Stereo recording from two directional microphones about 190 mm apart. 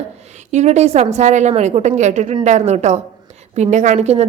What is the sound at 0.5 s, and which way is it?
A woman's voice, 35° right (ahead or behind).